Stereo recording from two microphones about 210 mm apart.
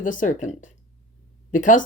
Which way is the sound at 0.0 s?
40° left (ahead or behind).